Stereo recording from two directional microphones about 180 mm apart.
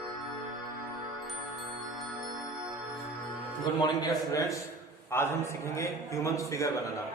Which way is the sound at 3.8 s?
20° left (ahead or behind).